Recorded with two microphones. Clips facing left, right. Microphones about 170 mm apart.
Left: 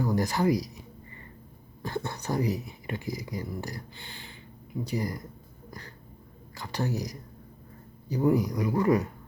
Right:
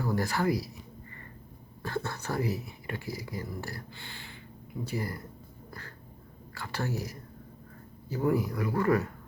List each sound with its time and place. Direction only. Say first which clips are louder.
0.0 s speech: left 3 dB; 15° left (ahead or behind)
1.8 s speech: left 1 dB; 15° left (ahead or behind)
6.5 s speech: left 3 dB; 15° left (ahead or behind)